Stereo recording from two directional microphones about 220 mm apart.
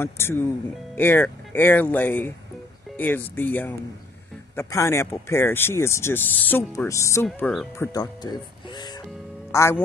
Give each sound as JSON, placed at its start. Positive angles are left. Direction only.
{"t": 0.0, "sound": "speech", "side_deg": 10}